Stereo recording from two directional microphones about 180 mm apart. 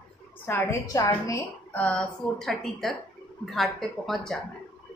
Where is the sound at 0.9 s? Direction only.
15° left (ahead or behind).